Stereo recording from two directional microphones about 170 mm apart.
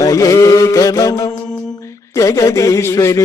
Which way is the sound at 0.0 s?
20° left (ahead or behind).